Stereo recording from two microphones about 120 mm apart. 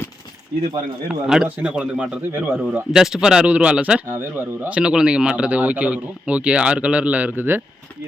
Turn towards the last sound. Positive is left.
turn(degrees=-15)  # may be behind; listen again after turning